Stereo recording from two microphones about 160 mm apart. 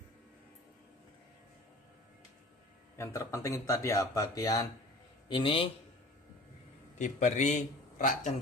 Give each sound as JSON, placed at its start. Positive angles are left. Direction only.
{"t": 3.0, "sound": "speech", "side_deg": 15}
{"t": 5.3, "sound": "a man's voice", "side_deg": 35}
{"t": 7.0, "sound": "a man's voice", "side_deg": 50}